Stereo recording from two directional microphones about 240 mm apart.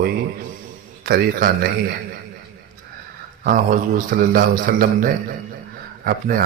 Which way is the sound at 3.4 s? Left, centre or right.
Right.